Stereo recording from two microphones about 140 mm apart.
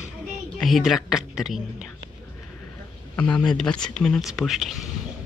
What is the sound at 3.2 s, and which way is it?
A man's voice, 5° left (ahead or behind).